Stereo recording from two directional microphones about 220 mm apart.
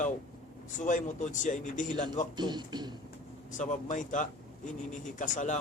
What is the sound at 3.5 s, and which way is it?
A man's voice, 35° left (ahead or behind).